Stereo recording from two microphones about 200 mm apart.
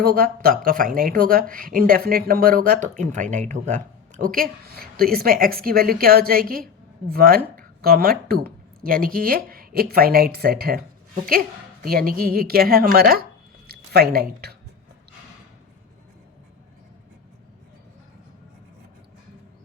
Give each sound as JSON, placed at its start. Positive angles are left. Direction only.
{"t": 0.0, "sound": "speech", "side_deg": -50}